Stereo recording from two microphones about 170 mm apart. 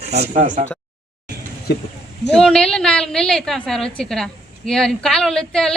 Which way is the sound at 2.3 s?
5° left (ahead or behind).